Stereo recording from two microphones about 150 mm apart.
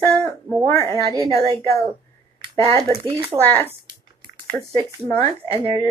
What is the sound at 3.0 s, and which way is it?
Speech, 35° right (ahead or behind).